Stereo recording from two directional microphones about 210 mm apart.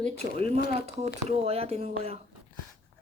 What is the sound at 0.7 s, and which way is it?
Speech, 30° right (ahead or behind).